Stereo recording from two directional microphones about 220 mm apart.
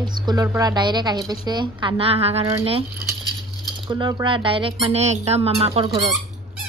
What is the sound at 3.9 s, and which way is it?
Speech, 20° right (ahead or behind).